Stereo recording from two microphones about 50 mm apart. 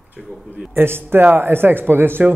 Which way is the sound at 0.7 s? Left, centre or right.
Right.